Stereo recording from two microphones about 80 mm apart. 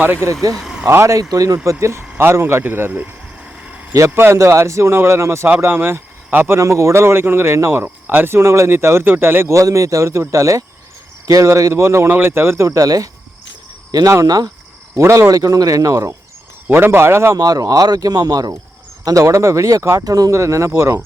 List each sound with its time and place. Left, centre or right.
0.0 s speech: right
0.6 s vehicle: centre
0.9 s speech: right
1.8 s speech: right
3.6 s vehicle: centre
4.1 s speech: right
6.6 s speech: right
14.9 s speech: right
16.6 s speech: right
17.3 s speech: right
19.0 s speech: right